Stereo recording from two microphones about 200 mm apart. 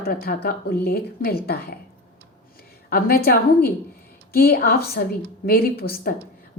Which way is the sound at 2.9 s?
50° left (ahead or behind).